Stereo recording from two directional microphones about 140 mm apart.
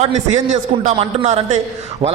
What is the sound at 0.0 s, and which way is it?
Speech, 55° right (ahead or behind).